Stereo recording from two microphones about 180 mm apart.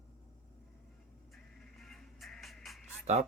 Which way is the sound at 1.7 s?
Centre (ahead or behind).